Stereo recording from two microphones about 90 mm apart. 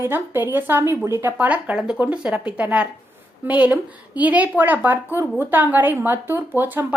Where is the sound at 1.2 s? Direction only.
20° right (ahead or behind).